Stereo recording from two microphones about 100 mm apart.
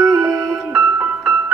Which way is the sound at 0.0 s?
30° right (ahead or behind).